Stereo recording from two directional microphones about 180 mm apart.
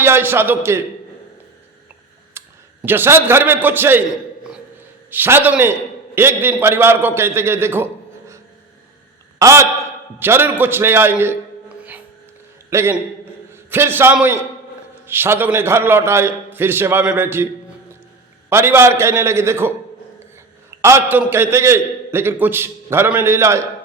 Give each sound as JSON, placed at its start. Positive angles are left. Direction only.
{"t": 0.0, "sound": "a man's voice", "side_deg": -10}
{"t": 2.4, "sound": "a sound", "side_deg": -15}
{"t": 2.8, "sound": "a man's voice", "side_deg": -10}
{"t": 5.1, "sound": "a man's voice", "side_deg": -10}
{"t": 9.4, "sound": "a man's voice", "side_deg": -15}